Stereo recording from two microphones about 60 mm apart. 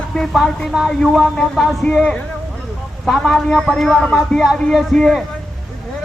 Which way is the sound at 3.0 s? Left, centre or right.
Centre.